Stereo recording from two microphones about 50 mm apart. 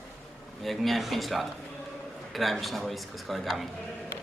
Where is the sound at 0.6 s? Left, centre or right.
Centre.